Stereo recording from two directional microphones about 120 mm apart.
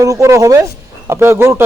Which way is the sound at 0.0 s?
25° right (ahead or behind).